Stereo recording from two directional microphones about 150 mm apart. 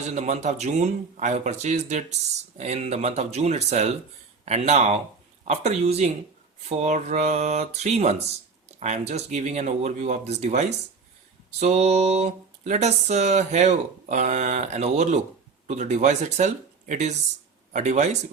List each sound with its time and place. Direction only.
0.1 s speech: 50° right (ahead or behind)